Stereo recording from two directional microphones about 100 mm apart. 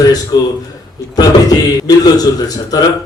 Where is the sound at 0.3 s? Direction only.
45° left (ahead or behind).